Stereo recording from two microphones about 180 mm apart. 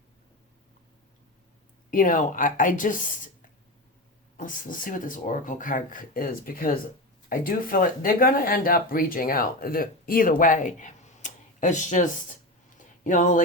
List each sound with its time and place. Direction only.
1.9 s speech: 50° left (ahead or behind)
4.4 s speech: 45° left (ahead or behind)
12.7 s a sound: 45° left (ahead or behind)